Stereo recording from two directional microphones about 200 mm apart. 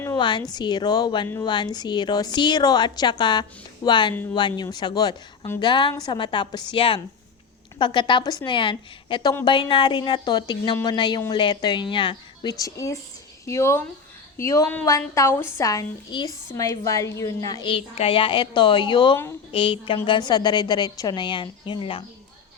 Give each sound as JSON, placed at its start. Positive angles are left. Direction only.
{"t": 0.2, "sound": "a woman's voice", "side_deg": 25}